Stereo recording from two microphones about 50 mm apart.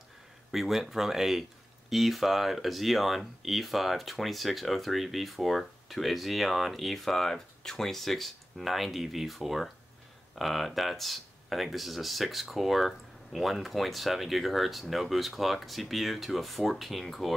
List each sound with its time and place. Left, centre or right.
0.5 s speech: centre